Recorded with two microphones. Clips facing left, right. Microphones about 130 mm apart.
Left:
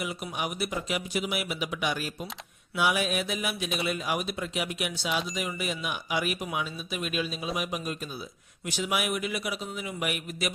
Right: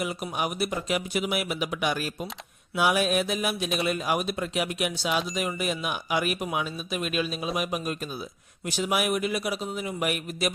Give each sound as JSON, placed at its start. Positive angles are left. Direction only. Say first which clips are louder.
{"t": 0.0, "sound": "speech", "louder": "right 3 dB", "side_deg": -45}
{"t": 8.6, "sound": "a man's voice", "louder": "right 3 dB", "side_deg": -40}